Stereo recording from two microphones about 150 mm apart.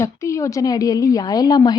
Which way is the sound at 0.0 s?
20° left (ahead or behind).